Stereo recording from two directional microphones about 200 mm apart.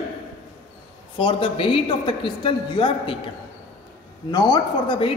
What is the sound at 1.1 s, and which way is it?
A man's voice, 25° left (ahead or behind).